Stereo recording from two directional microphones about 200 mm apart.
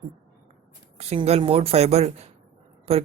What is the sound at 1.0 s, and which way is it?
Speech, 30° right (ahead or behind).